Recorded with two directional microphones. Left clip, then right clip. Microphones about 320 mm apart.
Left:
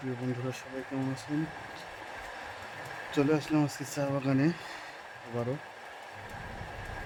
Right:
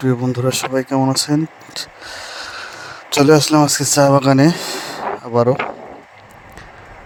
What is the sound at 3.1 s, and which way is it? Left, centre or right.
Speech, right.